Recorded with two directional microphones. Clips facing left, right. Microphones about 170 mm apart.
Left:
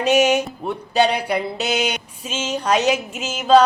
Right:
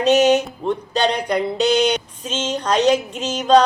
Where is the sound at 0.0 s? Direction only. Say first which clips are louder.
Right 2 dB; 10° left (ahead or behind).